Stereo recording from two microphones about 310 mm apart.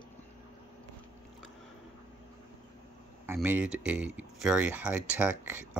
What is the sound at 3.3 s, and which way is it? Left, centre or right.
Speech, centre.